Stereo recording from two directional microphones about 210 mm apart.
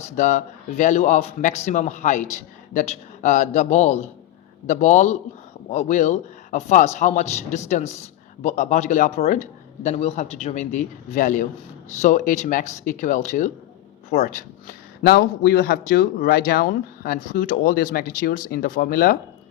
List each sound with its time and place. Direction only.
0.0 s speech: 35° left (ahead or behind)
15.0 s speech: 50° left (ahead or behind)